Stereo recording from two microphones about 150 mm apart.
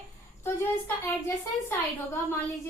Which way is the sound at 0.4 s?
15° left (ahead or behind).